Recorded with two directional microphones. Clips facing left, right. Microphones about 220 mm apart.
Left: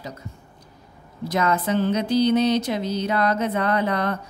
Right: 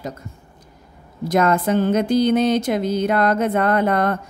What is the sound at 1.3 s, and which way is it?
Speech, 50° right (ahead or behind).